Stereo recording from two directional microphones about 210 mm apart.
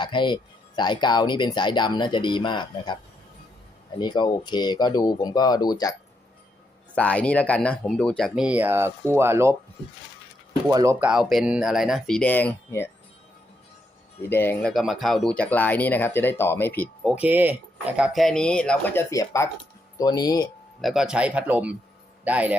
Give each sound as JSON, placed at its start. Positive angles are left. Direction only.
{"t": 0.0, "sound": "speech", "side_deg": 20}
{"t": 6.9, "sound": "speech", "side_deg": 5}
{"t": 10.7, "sound": "speech", "side_deg": -15}
{"t": 11.0, "sound": "speech", "side_deg": -5}
{"t": 14.2, "sound": "speech", "side_deg": 10}
{"t": 19.1, "sound": "speech", "side_deg": 15}
{"t": 20.8, "sound": "speech", "side_deg": 0}